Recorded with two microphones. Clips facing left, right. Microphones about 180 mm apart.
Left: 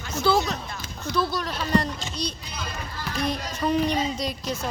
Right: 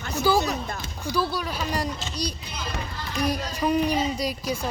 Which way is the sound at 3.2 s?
10° right (ahead or behind).